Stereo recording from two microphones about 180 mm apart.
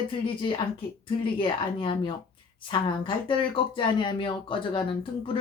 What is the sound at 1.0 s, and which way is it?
Speech, 30° left (ahead or behind).